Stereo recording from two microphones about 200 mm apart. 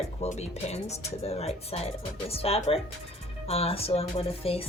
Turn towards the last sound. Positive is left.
turn(degrees=30)  # may be behind; listen again after turning